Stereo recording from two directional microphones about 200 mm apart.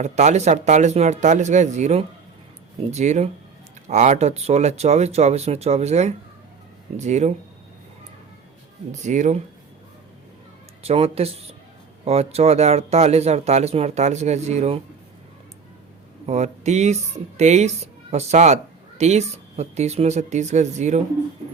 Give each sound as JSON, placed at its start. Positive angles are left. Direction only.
{"t": 0.0, "sound": "speech", "side_deg": -35}
{"t": 8.9, "sound": "speech", "side_deg": -35}
{"t": 10.8, "sound": "speech", "side_deg": -30}
{"t": 16.2, "sound": "speech", "side_deg": -35}